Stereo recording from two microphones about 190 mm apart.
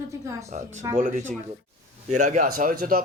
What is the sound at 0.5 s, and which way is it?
Speech, 40° right (ahead or behind).